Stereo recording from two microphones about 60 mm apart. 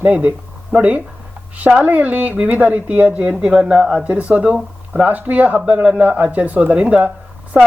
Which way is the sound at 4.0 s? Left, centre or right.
Right.